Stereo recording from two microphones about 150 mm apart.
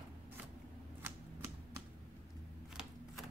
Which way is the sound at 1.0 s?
15° right (ahead or behind).